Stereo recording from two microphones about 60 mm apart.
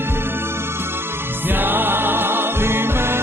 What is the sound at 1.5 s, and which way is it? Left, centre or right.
Music, right.